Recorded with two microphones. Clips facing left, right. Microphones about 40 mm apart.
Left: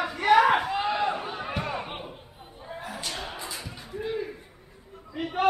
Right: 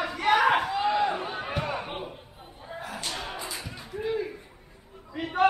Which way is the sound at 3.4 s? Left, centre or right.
Centre.